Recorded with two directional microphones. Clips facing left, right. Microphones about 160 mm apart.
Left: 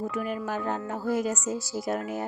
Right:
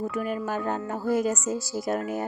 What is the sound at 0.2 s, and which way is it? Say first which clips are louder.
Speech: right 3 dB; 40° right (ahead or behind).